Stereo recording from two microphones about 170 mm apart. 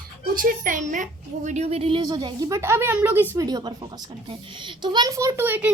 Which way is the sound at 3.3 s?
20° right (ahead or behind).